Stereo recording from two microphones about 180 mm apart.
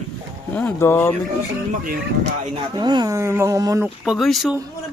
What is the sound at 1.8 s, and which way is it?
Speech, 55° right (ahead or behind).